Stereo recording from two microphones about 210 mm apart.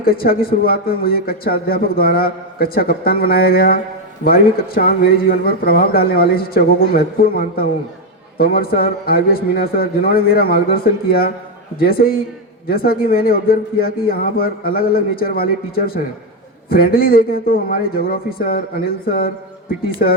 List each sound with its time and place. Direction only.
0.0 s a man's voice: 45° left (ahead or behind)
20.0 s speech: 40° left (ahead or behind)